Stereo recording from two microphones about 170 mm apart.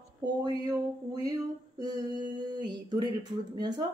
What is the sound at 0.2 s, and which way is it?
Speech, 25° right (ahead or behind).